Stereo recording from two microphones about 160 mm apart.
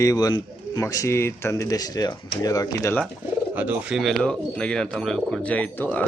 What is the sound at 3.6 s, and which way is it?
Speech, 10° right (ahead or behind).